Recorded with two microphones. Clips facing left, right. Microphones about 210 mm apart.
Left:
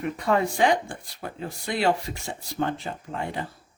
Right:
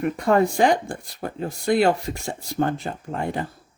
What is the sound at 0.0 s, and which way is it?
Speech, 45° right (ahead or behind).